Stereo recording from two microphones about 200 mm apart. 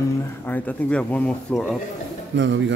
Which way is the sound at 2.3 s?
70° right (ahead or behind).